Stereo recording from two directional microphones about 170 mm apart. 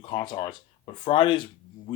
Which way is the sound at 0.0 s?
30° left (ahead or behind).